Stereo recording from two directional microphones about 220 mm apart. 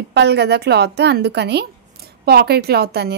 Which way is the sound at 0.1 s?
50° right (ahead or behind).